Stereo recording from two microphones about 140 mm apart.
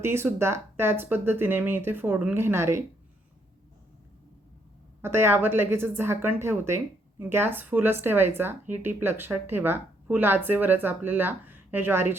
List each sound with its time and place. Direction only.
0.0 s speech: 15° right (ahead or behind)
5.0 s speech: 15° right (ahead or behind)